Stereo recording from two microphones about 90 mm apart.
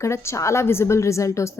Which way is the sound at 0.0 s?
30° left (ahead or behind).